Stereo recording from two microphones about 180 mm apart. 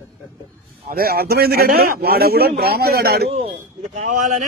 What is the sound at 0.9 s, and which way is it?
A man's voice, 55° right (ahead or behind).